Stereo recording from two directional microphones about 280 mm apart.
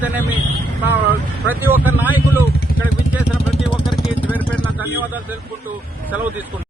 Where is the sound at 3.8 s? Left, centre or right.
Centre.